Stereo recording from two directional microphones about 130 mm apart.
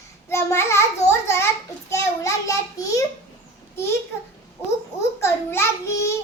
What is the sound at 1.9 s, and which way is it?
A child's voice, 25° left (ahead or behind).